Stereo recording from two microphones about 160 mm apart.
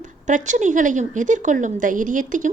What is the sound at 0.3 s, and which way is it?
A woman's voice, 50° right (ahead or behind).